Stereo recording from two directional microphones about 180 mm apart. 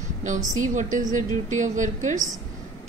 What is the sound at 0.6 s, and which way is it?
A woman's voice, 45° right (ahead or behind).